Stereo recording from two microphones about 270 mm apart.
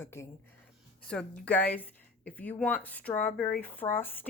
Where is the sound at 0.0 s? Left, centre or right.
Centre.